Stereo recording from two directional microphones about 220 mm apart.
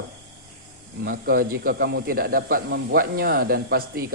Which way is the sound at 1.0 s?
40° right (ahead or behind).